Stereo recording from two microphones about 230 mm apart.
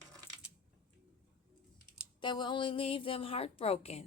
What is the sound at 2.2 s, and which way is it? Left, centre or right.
A woman's voice, centre.